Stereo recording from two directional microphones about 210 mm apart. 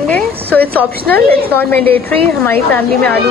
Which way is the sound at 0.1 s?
10° left (ahead or behind).